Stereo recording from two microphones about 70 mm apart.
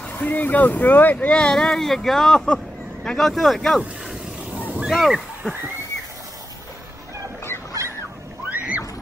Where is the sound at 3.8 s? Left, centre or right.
Centre.